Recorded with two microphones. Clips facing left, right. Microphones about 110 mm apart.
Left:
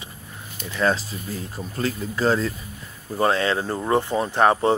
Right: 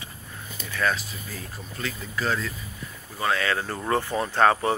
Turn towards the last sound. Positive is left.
turn(degrees=20)  # may be behind; listen again after turning